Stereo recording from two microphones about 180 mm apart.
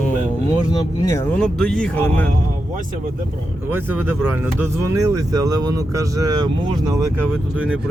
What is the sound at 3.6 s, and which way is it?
Speech, 10° right (ahead or behind).